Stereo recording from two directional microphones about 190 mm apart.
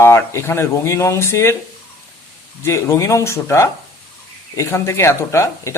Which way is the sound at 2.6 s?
15° left (ahead or behind).